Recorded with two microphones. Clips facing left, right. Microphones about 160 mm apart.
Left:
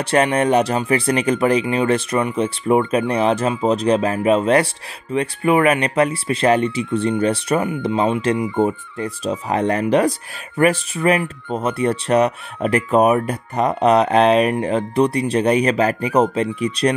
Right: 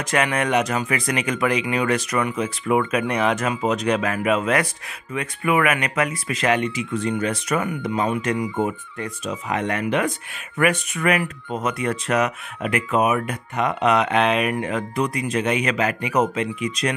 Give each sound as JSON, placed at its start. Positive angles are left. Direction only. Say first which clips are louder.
{"t": 0.0, "sound": "speech", "louder": "left 5 dB", "side_deg": 30}